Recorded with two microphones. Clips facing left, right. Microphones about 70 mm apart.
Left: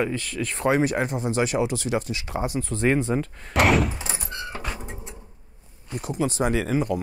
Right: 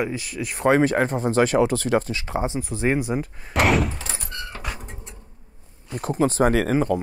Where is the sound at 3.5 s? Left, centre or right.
Centre.